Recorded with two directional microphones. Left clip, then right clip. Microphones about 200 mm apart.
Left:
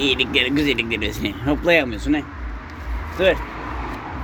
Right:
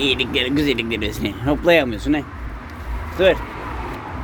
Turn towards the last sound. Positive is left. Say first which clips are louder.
# right 2 dB
turn(degrees=-25)  # may be behind; listen again after turning